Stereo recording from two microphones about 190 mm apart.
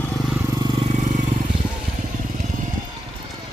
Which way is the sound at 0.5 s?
25° right (ahead or behind).